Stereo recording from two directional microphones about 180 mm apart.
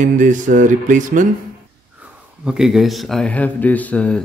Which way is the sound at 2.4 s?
5° right (ahead or behind).